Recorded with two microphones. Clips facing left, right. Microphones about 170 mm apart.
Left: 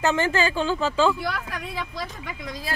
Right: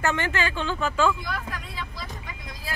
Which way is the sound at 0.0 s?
30° left (ahead or behind).